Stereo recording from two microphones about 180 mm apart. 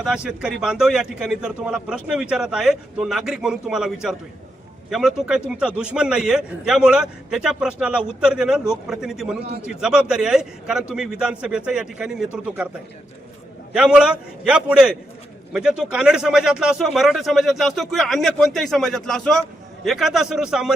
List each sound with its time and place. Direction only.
0.0 s speech: 5° right (ahead or behind)
13.7 s speech: 5° right (ahead or behind)